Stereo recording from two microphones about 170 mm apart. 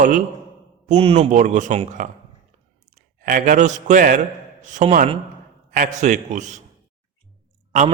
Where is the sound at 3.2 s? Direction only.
55° right (ahead or behind).